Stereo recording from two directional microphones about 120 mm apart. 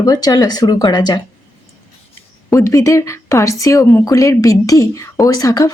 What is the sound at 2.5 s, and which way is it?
A woman's voice, 25° left (ahead or behind).